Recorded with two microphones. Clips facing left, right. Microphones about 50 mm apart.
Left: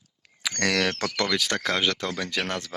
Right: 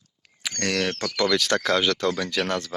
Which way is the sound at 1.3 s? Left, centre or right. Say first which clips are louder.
Right 4 dB; centre.